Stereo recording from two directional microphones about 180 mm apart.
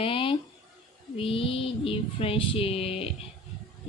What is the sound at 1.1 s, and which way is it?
Female singing, 30° left (ahead or behind).